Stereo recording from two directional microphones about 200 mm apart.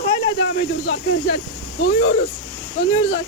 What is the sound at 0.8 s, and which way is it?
Speech, 60° left (ahead or behind).